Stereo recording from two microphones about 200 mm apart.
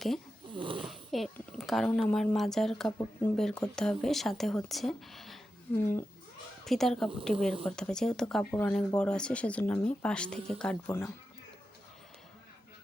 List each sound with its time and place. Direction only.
0.5 s snoring: 25° right (ahead or behind)
0.9 s speech: centre (ahead or behind)
5.7 s speech: 10° left (ahead or behind)